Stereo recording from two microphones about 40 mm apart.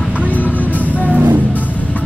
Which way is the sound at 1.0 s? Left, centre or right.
Right.